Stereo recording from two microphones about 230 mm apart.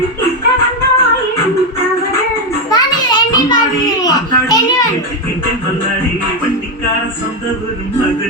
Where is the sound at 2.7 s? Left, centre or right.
Centre.